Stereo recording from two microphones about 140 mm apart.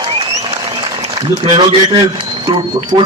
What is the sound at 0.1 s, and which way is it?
Applause, 45° right (ahead or behind).